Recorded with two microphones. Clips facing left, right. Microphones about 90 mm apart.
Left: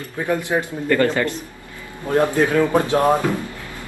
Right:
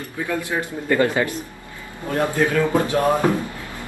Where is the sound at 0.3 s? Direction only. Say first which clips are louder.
Left 4 dB; 20° left (ahead or behind).